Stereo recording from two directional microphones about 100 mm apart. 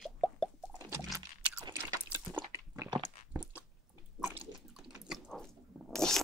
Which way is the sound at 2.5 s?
30° right (ahead or behind).